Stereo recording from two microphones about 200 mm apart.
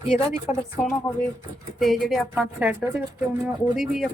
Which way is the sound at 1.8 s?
Centre (ahead or behind).